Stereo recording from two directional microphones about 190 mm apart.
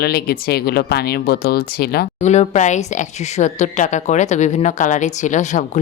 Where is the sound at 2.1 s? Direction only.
35° left (ahead or behind).